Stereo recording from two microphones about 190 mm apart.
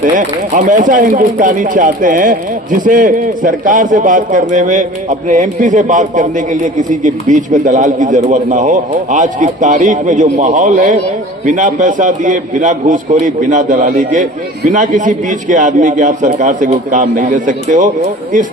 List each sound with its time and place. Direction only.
0.0 s a man's voice: 45° right (ahead or behind)